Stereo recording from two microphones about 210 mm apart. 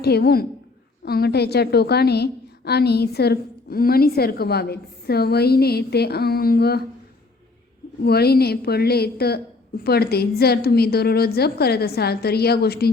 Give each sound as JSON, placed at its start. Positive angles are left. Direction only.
{"t": 0.0, "sound": "a woman's voice", "side_deg": 50}
{"t": 8.0, "sound": "a woman's voice", "side_deg": 50}